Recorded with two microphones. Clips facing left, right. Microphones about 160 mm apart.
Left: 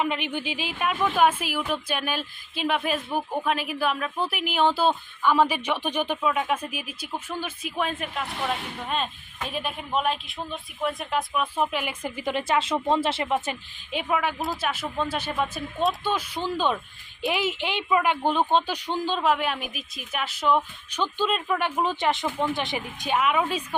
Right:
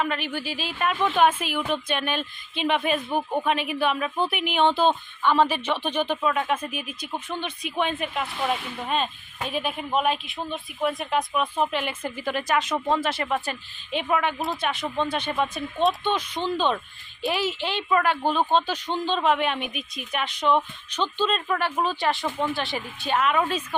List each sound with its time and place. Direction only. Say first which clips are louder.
0.0 s speech: even; 15° left (ahead or behind)
13.9 s speech: right 2 dB; 5° left (ahead or behind)